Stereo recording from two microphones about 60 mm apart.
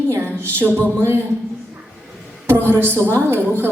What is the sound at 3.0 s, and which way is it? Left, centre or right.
Speech, right.